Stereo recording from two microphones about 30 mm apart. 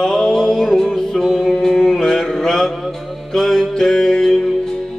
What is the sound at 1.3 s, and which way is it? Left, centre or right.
Music, centre.